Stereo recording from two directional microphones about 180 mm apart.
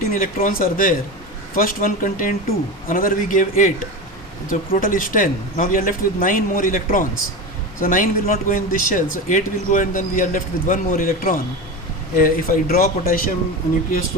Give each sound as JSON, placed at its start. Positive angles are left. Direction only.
{"t": 0.0, "sound": "speech", "side_deg": 50}